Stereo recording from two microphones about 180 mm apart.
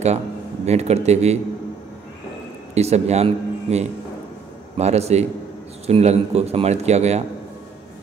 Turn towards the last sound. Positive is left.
turn(degrees=-40)  # may be behind; listen again after turning